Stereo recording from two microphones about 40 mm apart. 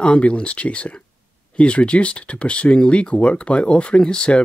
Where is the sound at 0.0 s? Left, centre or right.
Left.